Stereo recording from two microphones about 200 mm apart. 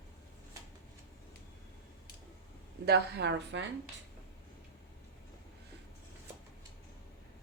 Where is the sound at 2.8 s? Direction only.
55° right (ahead or behind).